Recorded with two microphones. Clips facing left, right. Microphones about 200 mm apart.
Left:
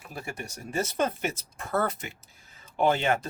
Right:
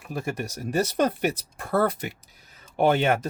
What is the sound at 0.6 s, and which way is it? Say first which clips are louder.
Speech: right 5 dB; 70° right (ahead or behind).